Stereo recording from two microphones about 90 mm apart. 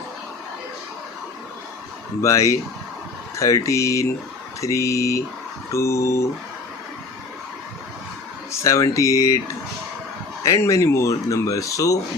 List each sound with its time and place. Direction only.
2.2 s speech: 35° left (ahead or behind)
8.6 s speech: 35° left (ahead or behind)
10.4 s speech: 35° left (ahead or behind)